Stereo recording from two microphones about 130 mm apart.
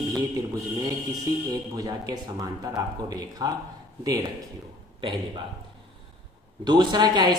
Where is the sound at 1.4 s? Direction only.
30° right (ahead or behind).